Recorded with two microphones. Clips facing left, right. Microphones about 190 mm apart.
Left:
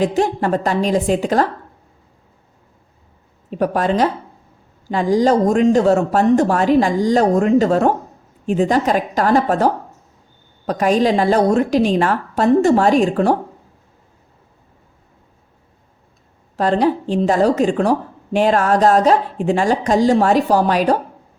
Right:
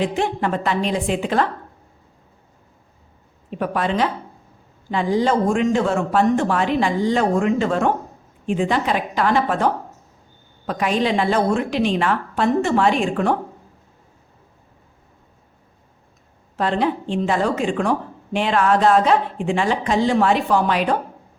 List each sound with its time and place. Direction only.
0.0 s speech: 40° left (ahead or behind)
3.5 s speech: 40° left (ahead or behind)
16.6 s speech: 40° left (ahead or behind)